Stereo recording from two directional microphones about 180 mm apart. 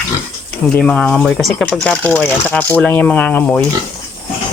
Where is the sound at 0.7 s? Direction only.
5° left (ahead or behind).